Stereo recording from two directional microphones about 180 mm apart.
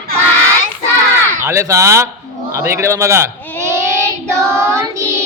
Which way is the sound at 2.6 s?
15° right (ahead or behind).